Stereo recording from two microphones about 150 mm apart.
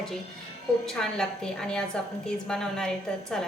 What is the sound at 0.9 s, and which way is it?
A woman's voice, 5° left (ahead or behind).